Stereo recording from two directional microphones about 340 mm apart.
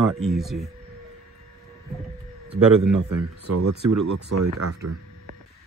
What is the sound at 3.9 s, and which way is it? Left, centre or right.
Speech, right.